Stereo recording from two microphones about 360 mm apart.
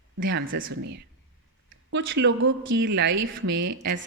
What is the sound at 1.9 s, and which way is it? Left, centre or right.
A woman's voice, right.